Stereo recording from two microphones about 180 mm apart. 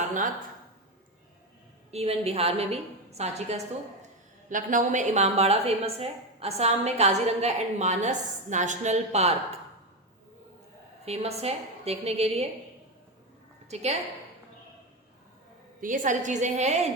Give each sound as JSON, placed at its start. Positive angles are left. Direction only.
{"t": 1.9, "sound": "a woman's voice", "side_deg": -35}
{"t": 11.0, "sound": "a woman's voice", "side_deg": -35}
{"t": 13.7, "sound": "a woman's voice", "side_deg": -35}
{"t": 15.8, "sound": "a woman's voice", "side_deg": -45}